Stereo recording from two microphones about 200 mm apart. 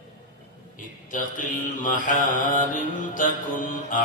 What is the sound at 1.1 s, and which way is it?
Mantra, 40° left (ahead or behind).